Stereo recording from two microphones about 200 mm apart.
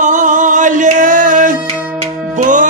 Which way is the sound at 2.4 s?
40° right (ahead or behind).